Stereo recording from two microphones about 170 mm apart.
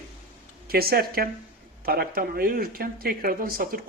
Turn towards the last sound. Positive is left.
turn(degrees=-60)  # may be behind; listen again after turning